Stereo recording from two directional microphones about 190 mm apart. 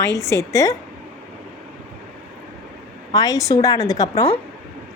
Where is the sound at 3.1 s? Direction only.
20° left (ahead or behind).